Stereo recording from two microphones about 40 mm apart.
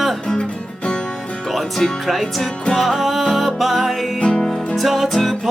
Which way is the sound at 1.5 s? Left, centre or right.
Centre.